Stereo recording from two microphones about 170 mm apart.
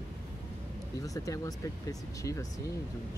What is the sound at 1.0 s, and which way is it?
Speech, 20° left (ahead or behind).